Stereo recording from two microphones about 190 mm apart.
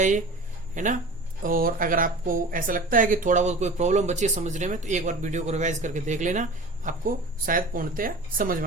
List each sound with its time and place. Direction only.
0.7 s a woman's voice: 40° right (ahead or behind)